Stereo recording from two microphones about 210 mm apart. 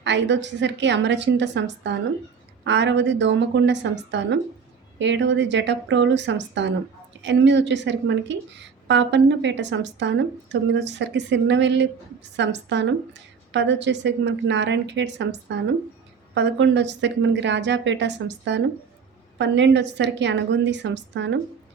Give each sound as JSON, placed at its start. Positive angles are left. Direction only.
{"t": 0.0, "sound": "a woman's voice", "side_deg": -55}